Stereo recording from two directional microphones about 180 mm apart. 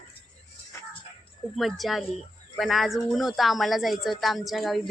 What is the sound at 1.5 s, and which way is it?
A woman's voice, centre (ahead or behind).